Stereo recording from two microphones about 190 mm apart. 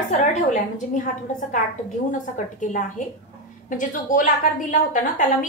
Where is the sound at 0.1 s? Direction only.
40° left (ahead or behind).